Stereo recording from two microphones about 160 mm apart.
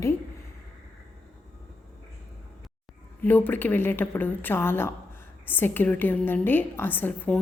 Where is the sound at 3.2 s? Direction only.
10° left (ahead or behind).